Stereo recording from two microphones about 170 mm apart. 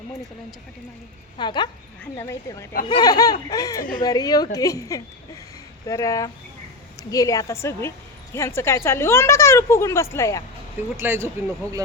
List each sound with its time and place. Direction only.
1.4 s a woman's voice: 25° left (ahead or behind)
10.8 s speech: 15° right (ahead or behind)